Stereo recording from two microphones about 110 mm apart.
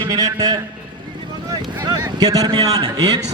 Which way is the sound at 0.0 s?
35° right (ahead or behind).